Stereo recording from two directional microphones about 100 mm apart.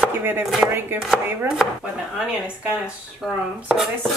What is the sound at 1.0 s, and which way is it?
Speech, centre (ahead or behind).